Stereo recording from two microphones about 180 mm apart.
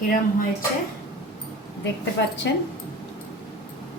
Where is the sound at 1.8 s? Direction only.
80° left.